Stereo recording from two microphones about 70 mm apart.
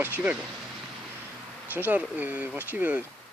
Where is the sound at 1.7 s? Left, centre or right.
Right.